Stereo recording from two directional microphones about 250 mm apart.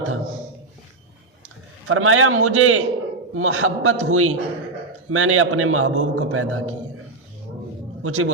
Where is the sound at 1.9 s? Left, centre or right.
Right.